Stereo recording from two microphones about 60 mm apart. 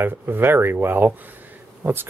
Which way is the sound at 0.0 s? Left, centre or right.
Right.